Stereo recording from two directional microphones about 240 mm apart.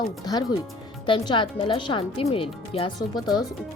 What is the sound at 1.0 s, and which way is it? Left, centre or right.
Speech, centre.